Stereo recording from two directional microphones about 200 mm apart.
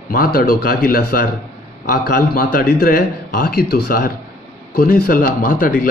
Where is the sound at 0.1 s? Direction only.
50° left (ahead or behind).